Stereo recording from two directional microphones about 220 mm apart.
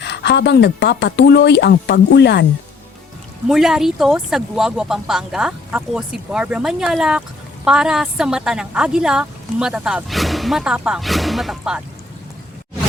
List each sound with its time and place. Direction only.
0.0 s speech: 50° left (ahead or behind)
3.5 s speech: centre (ahead or behind)